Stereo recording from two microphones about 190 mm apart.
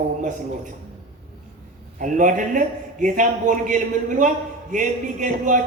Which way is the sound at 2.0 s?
45° right (ahead or behind).